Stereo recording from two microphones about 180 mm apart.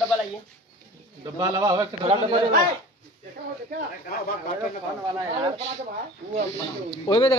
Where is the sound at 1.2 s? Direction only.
20° right (ahead or behind).